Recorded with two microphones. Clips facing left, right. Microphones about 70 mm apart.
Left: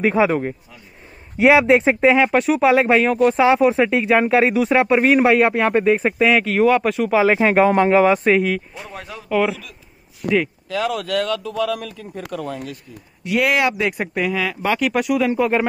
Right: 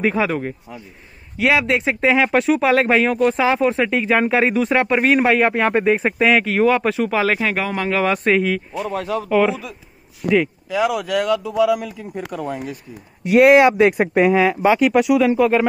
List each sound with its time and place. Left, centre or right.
0.0 s speech: centre
1.4 s speech: left
2.0 s speech: centre
7.2 s speech: left
8.2 s speech: centre
8.8 s speech: right
10.3 s speech: centre
13.2 s speech: right
14.6 s speech: centre